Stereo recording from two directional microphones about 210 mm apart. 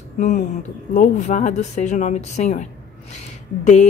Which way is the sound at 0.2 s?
35° left (ahead or behind).